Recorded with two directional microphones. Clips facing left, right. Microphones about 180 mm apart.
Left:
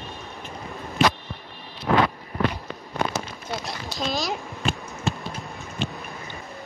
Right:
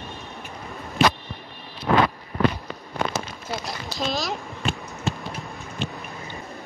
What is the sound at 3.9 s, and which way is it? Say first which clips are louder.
Speech: even; centre (ahead or behind).